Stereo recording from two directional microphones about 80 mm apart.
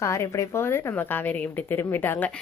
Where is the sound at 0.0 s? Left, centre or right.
Left.